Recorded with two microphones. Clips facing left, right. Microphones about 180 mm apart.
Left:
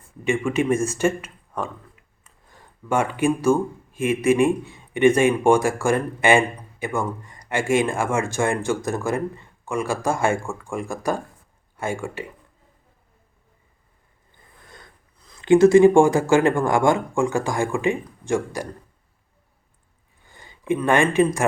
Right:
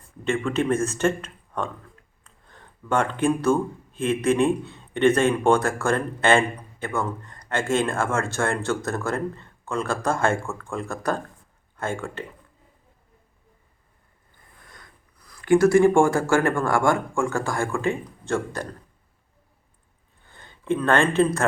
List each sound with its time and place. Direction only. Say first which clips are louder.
0.3 s speech: left 2 dB; 10° left (ahead or behind)
14.7 s speech: left 4 dB; 25° left (ahead or behind)
20.2 s speech: left 2 dB; 10° left (ahead or behind)